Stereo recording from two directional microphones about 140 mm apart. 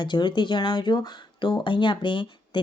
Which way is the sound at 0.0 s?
30° left (ahead or behind).